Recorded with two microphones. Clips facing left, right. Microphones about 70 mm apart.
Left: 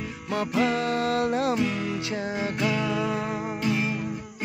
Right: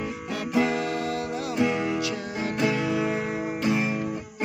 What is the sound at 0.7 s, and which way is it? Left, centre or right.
Music, left.